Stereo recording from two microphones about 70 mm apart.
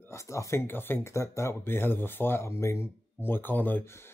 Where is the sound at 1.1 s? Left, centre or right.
Left.